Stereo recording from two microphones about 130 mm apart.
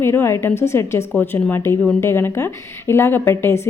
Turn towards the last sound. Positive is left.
turn(degrees=20)  # may be behind; listen again after turning